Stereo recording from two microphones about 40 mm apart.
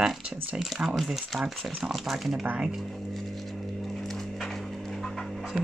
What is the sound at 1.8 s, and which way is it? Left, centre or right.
Speech, centre.